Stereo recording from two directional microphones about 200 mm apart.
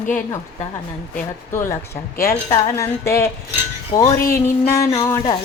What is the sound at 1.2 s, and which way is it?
A woman's voice, 15° left (ahead or behind).